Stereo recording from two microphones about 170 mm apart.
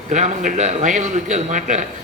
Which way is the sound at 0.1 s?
45° right (ahead or behind).